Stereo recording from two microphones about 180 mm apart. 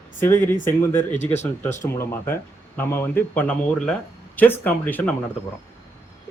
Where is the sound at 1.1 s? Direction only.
40° left (ahead or behind).